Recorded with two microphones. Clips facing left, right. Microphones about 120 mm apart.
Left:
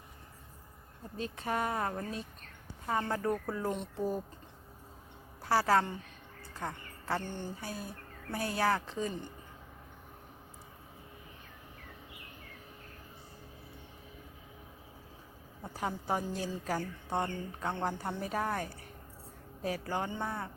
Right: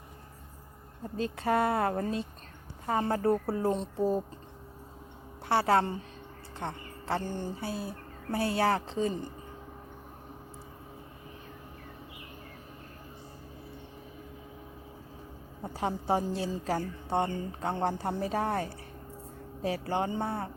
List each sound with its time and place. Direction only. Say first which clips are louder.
1.1 s a woman's voice: right 7 dB; 35° right (ahead or behind)
5.5 s a woman's voice: right 2 dB; 25° right (ahead or behind)
15.6 s a woman's voice: right 5 dB; 30° right (ahead or behind)